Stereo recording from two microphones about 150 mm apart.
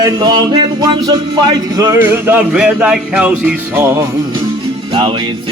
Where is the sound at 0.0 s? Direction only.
25° right (ahead or behind).